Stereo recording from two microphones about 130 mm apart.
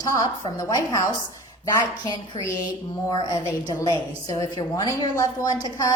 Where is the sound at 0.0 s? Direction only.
25° left (ahead or behind).